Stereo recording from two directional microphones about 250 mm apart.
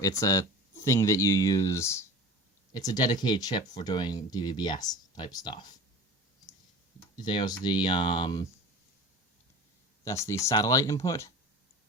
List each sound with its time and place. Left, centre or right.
0.0 s speech: centre
7.2 s speech: centre
10.0 s speech: centre